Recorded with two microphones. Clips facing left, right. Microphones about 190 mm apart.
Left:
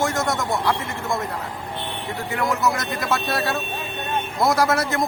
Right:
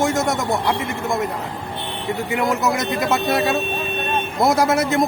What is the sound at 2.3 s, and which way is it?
A man's voice, 20° right (ahead or behind).